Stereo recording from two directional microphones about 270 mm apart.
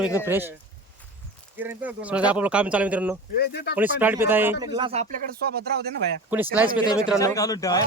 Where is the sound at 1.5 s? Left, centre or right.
Centre.